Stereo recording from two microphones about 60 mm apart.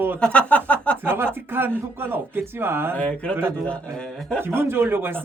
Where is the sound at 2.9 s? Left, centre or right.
Left.